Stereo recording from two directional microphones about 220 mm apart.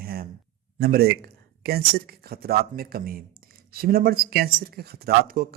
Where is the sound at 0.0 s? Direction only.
45° right (ahead or behind).